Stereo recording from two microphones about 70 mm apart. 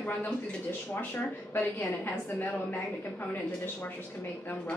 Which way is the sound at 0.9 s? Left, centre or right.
Left.